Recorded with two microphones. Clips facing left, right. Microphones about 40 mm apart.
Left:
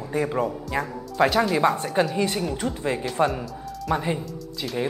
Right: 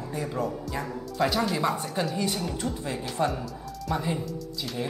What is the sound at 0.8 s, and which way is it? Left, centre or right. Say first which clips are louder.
Speech: left 6 dB; centre.